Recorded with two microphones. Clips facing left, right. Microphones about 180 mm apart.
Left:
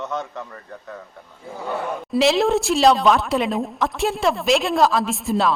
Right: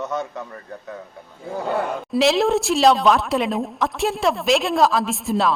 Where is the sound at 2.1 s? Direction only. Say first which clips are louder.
Left 1 dB; centre (ahead or behind).